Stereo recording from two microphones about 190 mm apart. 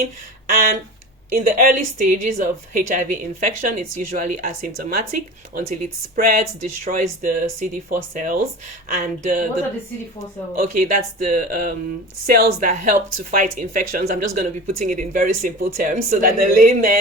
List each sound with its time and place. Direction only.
0.0 s speech: 50° right (ahead or behind)
10.5 s speech: 45° right (ahead or behind)